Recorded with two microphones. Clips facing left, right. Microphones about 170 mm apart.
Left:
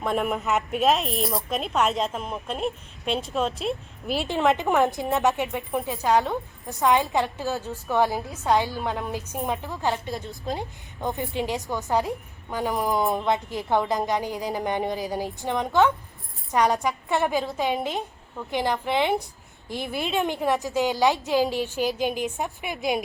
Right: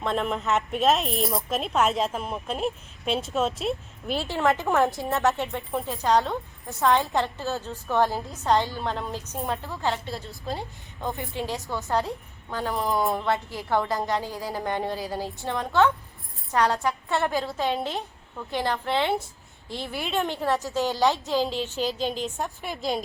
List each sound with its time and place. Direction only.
0.0 s speech: 5° left (ahead or behind)
4.3 s a woman's voice: 20° left (ahead or behind)